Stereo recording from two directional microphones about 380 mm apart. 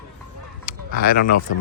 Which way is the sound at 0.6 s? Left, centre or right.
Left.